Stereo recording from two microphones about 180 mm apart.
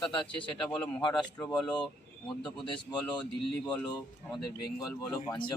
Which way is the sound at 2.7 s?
5° left (ahead or behind).